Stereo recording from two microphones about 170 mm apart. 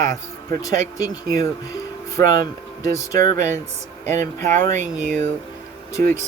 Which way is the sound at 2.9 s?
20° left (ahead or behind).